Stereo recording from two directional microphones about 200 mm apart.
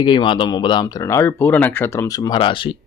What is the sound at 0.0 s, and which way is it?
Speech, 25° left (ahead or behind).